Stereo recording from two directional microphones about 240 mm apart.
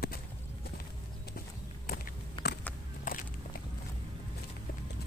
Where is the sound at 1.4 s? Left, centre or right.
Left.